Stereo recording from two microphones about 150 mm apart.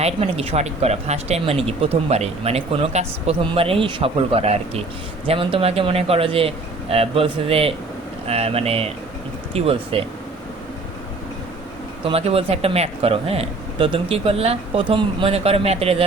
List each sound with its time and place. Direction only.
0.0 s speech: 40° right (ahead or behind)
12.0 s speech: 40° right (ahead or behind)